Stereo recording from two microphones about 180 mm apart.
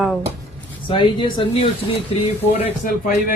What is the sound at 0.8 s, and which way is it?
Speech, 25° left (ahead or behind).